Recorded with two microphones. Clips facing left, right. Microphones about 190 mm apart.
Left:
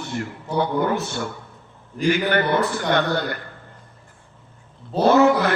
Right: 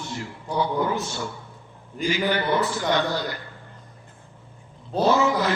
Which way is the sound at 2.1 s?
55° left (ahead or behind).